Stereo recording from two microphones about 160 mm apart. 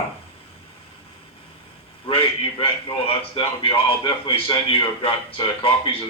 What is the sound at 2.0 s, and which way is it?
Speech, 30° left (ahead or behind).